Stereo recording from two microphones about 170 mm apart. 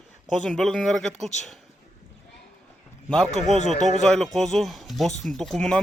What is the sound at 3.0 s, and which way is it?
Speech, 5° left (ahead or behind).